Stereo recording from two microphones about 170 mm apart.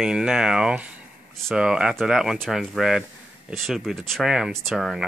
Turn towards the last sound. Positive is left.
turn(degrees=-5)  # may be behind; listen again after turning